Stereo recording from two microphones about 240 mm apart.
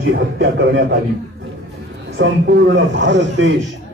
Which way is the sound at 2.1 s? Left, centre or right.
Right.